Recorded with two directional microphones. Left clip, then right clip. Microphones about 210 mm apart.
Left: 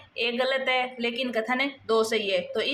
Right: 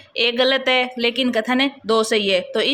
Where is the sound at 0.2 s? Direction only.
45° right (ahead or behind).